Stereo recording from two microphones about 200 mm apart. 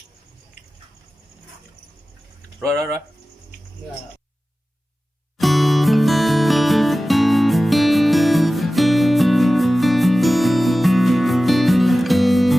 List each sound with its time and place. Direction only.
5.4 s music: centre (ahead or behind)